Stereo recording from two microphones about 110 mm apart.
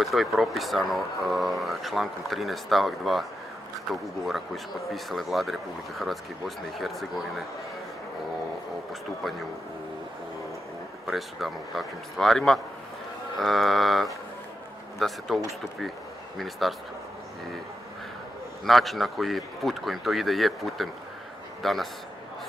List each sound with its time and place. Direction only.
0.0 s speech: centre (ahead or behind)
4.8 s speech: centre (ahead or behind)
11.1 s speech: centre (ahead or behind)
18.7 s speech: centre (ahead or behind)